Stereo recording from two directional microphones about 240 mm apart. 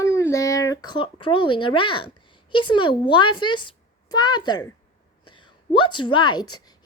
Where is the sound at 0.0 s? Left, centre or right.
Centre.